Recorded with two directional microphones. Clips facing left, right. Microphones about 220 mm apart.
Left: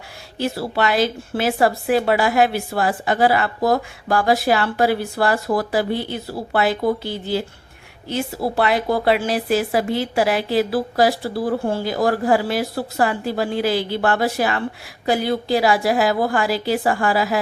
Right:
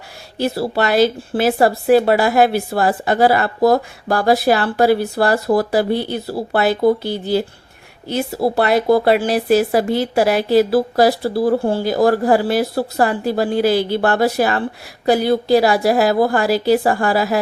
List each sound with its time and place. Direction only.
0.3 s speech: 35° right (ahead or behind)